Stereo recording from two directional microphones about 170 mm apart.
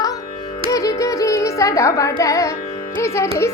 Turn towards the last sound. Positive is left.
turn(degrees=15)  # may be behind; listen again after turning